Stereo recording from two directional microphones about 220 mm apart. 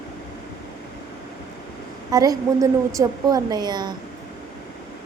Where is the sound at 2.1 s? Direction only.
15° right (ahead or behind).